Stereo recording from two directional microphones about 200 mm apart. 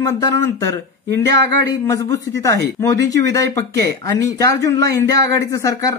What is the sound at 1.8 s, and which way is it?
Speech, 15° left (ahead or behind).